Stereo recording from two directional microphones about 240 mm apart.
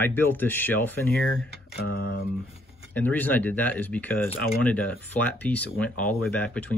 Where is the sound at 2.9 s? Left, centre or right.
Centre.